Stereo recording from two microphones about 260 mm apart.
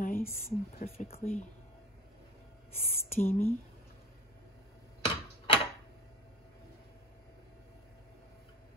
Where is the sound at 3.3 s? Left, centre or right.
Centre.